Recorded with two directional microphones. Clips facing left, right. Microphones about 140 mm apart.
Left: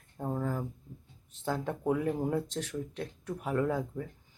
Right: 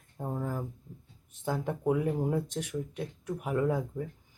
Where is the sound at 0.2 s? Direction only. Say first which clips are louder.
Left 1 dB; centre (ahead or behind).